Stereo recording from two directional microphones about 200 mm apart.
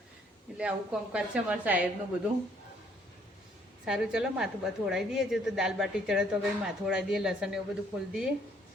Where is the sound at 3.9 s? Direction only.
5° right (ahead or behind).